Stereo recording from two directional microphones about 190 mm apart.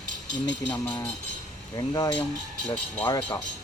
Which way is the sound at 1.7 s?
20° left (ahead or behind).